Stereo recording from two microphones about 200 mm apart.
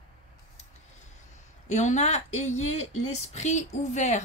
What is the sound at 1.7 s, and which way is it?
Speech, 35° left (ahead or behind).